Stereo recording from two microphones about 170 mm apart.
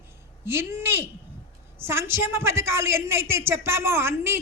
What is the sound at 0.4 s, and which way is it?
A man's voice, 15° right (ahead or behind).